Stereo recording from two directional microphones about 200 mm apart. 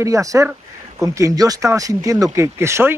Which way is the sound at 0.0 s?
15° right (ahead or behind).